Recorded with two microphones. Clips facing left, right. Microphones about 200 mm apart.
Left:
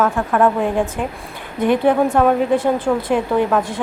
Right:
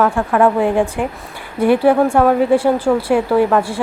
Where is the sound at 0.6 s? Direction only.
15° right (ahead or behind).